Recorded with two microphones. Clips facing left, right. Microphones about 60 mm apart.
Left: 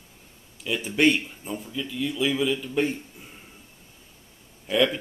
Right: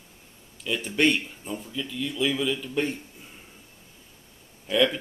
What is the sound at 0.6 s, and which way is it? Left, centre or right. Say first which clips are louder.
Speech: left 2 dB; centre.